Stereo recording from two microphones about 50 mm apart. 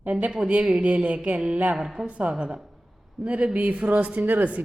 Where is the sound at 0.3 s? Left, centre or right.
Centre.